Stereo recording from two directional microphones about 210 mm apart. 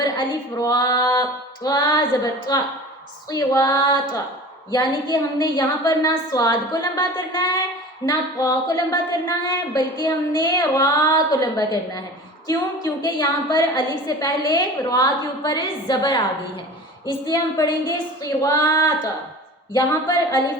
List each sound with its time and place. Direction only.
0.0 s a woman's voice: 20° left (ahead or behind)